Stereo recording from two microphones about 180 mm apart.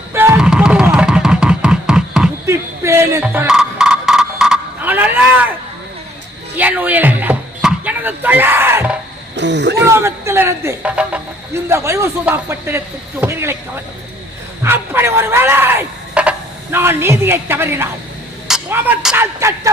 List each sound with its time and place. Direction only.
0.1 s music: 15° right (ahead or behind)
2.5 s speech: 15° right (ahead or behind)
3.4 s a sound: 5° right (ahead or behind)
6.6 s a sound: 10° right (ahead or behind)
9.3 s speech: 75° right (ahead or behind)
9.8 s speech: 15° right (ahead or behind)